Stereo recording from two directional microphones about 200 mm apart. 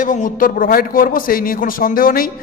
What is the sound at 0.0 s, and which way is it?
A man's voice, 40° left (ahead or behind).